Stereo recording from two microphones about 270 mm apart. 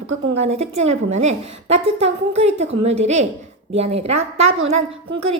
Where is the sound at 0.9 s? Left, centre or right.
Right.